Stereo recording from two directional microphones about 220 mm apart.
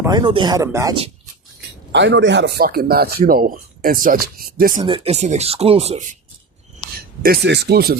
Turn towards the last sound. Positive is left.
turn(degrees=-45)  # may be behind; listen again after turning